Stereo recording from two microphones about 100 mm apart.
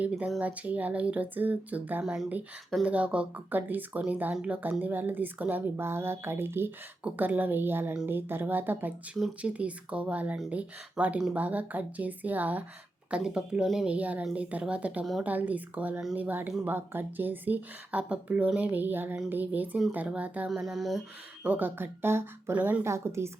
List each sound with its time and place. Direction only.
0.0 s speech: 15° right (ahead or behind)
20.5 s speech: 5° right (ahead or behind)
21.4 s speech: 15° right (ahead or behind)
22.9 s speech: 30° right (ahead or behind)